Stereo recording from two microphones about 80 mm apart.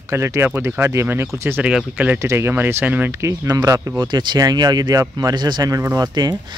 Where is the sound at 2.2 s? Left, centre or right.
Right.